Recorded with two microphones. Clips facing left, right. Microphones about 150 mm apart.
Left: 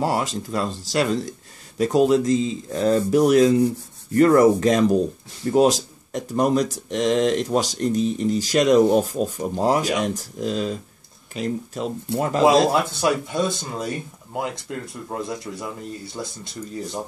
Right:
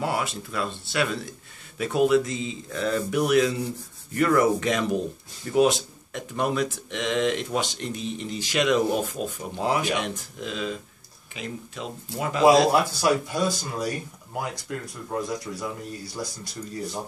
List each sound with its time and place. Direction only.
0.0 s a man's voice: 35° left (ahead or behind)
12.4 s speech: 25° left (ahead or behind)